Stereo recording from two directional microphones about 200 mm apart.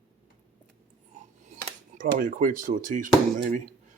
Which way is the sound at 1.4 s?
40° right (ahead or behind).